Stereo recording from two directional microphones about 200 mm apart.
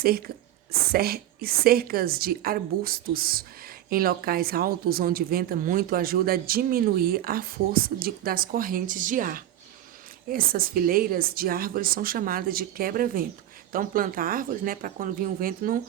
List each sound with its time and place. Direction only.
0.0 s a woman's voice: 50° right (ahead or behind)